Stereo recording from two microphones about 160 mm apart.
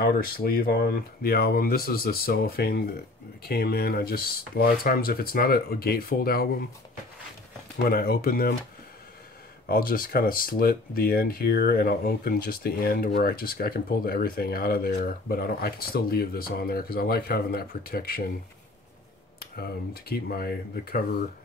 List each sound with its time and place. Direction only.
0.0 s speech: 65° left (ahead or behind)
7.7 s speech: 70° left (ahead or behind)
9.7 s speech: 65° left (ahead or behind)
19.5 s speech: 75° left (ahead or behind)